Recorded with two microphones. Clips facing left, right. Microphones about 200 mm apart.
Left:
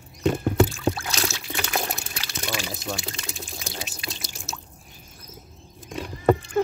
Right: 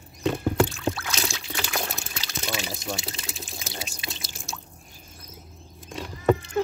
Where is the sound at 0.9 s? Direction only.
25° left (ahead or behind).